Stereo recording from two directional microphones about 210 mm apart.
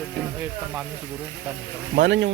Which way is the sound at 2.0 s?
55° right (ahead or behind).